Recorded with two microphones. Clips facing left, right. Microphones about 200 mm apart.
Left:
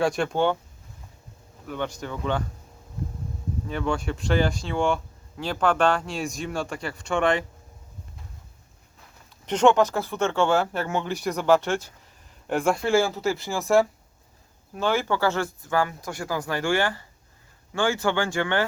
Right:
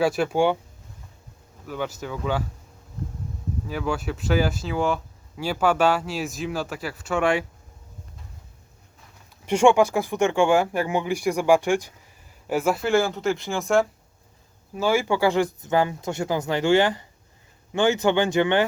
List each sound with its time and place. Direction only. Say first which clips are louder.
0.0 s speech: right 2 dB; 5° right (ahead or behind)
1.6 s speech: right 1 dB; 5° right (ahead or behind)
3.7 s speech: even; 5° right (ahead or behind)
9.5 s speech: right 2 dB; 10° right (ahead or behind)